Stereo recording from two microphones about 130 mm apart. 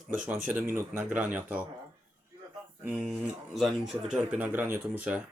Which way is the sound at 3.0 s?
Centre (ahead or behind).